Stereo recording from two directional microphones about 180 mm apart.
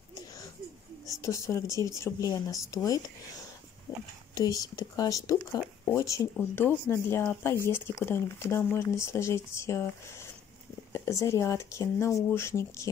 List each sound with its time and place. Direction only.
1.2 s speech: 15° left (ahead or behind)
10.9 s speech: 15° left (ahead or behind)